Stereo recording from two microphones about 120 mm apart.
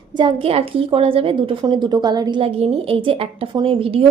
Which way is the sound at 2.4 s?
55° right (ahead or behind).